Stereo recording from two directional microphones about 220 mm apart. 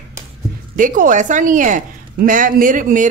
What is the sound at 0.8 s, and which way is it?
Speech, 35° right (ahead or behind).